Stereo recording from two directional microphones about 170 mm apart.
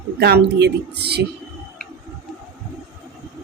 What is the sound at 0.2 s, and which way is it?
A woman's voice, 75° right (ahead or behind).